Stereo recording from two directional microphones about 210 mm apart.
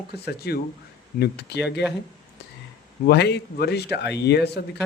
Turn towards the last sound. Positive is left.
turn(degrees=50)  # may be behind; listen again after turning